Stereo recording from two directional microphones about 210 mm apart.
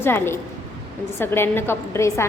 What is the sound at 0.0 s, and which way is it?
A woman's voice, 10° left (ahead or behind).